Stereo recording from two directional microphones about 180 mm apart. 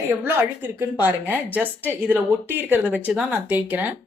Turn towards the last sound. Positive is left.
turn(degrees=-10)  # may be behind; listen again after turning